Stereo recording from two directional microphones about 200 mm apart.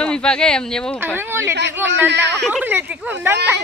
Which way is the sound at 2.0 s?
60° right (ahead or behind).